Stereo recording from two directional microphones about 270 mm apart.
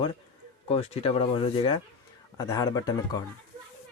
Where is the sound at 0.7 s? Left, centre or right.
Left.